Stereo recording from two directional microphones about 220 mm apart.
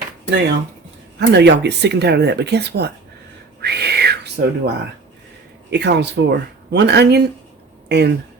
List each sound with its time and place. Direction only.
0.3 s speech: 50° right (ahead or behind)
3.6 s a sound: 50° right (ahead or behind)
5.7 s speech: 50° right (ahead or behind)